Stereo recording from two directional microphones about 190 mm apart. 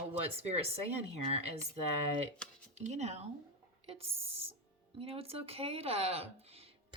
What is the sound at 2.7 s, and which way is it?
Speech, 35° right (ahead or behind).